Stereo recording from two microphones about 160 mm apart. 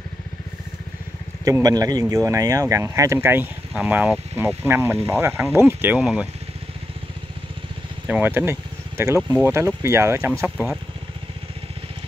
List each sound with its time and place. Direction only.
1.4 s speech: 20° right (ahead or behind)
8.1 s speech: 10° right (ahead or behind)